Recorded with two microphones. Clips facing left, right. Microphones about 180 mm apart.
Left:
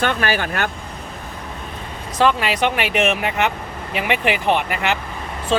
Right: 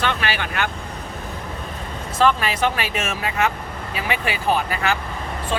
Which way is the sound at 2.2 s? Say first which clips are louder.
Left 1 dB; 15° left (ahead or behind).